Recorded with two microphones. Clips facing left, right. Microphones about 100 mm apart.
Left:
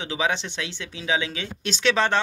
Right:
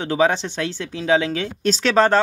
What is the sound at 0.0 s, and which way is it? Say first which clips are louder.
Speech: right 7 dB; 45° right (ahead or behind).